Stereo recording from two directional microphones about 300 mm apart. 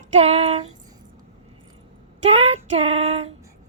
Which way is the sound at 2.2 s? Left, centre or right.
Right.